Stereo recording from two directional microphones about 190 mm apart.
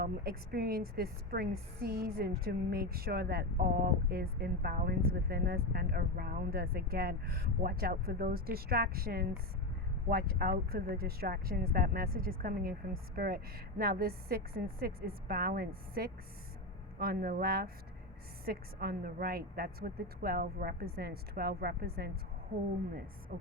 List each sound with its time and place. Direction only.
0.0 s a woman's voice: 50° right (ahead or behind)
23.3 s a woman's voice: 45° right (ahead or behind)